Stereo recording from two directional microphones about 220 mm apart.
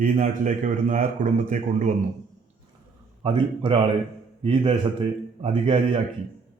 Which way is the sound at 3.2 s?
25° right (ahead or behind).